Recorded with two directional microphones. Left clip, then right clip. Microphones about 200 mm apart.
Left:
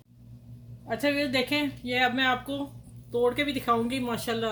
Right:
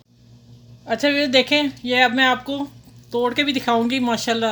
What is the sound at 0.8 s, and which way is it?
Speech, 45° right (ahead or behind).